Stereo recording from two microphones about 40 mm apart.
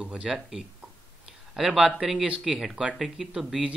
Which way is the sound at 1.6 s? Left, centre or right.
Centre.